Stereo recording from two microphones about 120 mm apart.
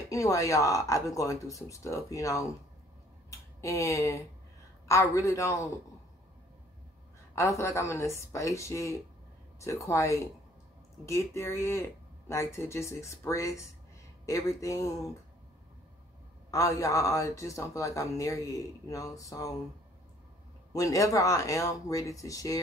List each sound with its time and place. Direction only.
0.1 s speech: 25° left (ahead or behind)
7.3 s speech: 25° left (ahead or behind)
16.4 s speech: 30° left (ahead or behind)
20.7 s speech: 30° left (ahead or behind)